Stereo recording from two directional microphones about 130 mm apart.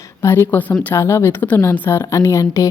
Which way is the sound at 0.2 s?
20° left (ahead or behind).